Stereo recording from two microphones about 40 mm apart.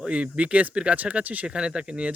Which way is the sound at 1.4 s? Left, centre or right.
Right.